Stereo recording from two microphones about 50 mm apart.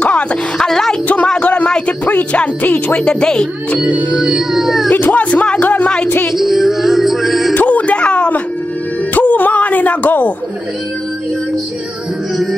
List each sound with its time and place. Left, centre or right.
0.0 s speech: left
0.7 s music: centre
1.0 s a sound: left
2.6 s speech: left
3.0 s speech: centre
3.8 s music: right
4.3 s speech: centre
4.9 s speech: left
6.0 s speech: left
6.3 s music: centre
7.5 s music: left
9.1 s a sound: left